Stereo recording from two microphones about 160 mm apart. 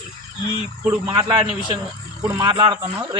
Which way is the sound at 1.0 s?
25° right (ahead or behind).